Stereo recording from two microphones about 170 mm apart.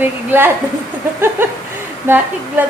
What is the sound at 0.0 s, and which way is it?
A woman's voice, 10° right (ahead or behind).